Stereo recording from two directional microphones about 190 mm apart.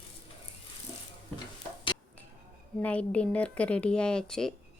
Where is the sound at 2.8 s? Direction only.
5° left (ahead or behind).